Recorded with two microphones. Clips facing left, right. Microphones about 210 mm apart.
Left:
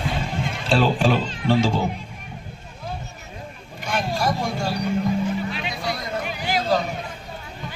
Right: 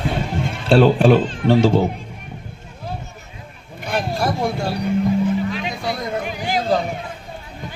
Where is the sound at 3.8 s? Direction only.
60° right (ahead or behind).